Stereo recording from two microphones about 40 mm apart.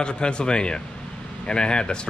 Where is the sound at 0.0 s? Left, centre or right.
Left.